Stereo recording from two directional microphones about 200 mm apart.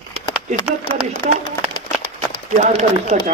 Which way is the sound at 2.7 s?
35° right (ahead or behind).